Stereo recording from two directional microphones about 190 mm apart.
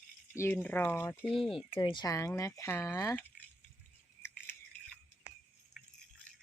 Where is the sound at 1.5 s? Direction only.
25° left (ahead or behind).